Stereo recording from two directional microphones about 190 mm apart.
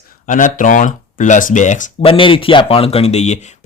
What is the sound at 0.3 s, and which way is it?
Speech, 40° left (ahead or behind).